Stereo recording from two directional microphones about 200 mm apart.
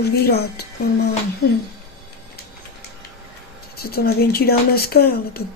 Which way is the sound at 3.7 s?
50° left (ahead or behind).